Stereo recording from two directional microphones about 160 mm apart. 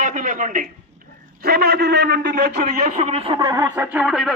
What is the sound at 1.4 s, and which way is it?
A man's voice, 75° right (ahead or behind).